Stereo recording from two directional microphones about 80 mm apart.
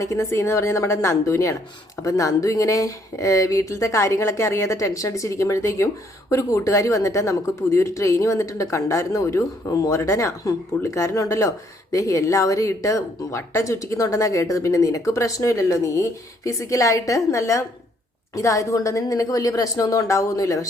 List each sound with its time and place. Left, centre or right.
0.0 s a woman's voice: left